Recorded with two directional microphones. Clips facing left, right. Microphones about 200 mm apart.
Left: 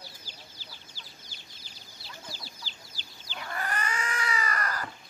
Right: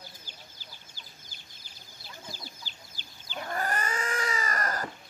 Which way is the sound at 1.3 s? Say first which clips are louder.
Left 2 dB; 50° right (ahead or behind).